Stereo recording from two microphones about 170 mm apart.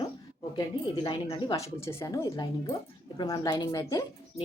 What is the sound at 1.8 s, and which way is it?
Speech, 15° left (ahead or behind).